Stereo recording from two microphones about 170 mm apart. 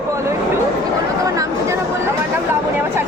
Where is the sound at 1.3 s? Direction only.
20° right (ahead or behind).